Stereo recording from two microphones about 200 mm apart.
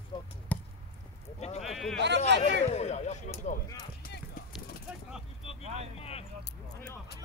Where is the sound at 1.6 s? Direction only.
Centre (ahead or behind).